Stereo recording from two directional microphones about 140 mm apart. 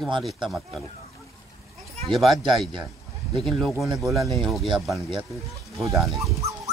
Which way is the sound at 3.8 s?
Centre (ahead or behind).